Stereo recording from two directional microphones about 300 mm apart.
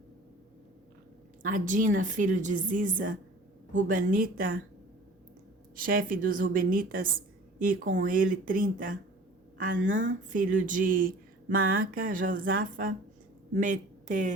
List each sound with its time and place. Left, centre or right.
1.4 s speech: right
5.7 s speech: right